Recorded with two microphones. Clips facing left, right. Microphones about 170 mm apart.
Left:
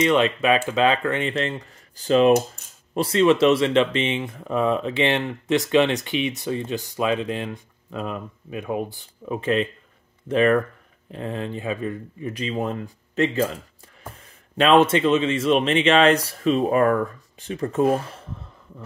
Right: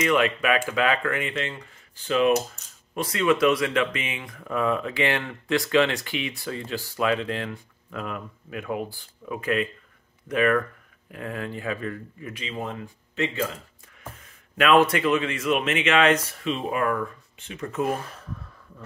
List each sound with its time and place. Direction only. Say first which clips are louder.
0.0 s speech: left 3 dB; 25° left (ahead or behind)
12.3 s speech: left 7 dB; 40° left (ahead or behind)
14.6 s speech: left 3 dB; 25° left (ahead or behind)